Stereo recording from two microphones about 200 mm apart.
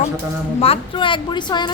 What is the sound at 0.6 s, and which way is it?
Speech, 25° left (ahead or behind).